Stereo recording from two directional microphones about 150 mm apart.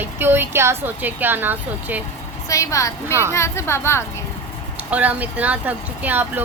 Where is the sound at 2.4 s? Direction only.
20° left (ahead or behind).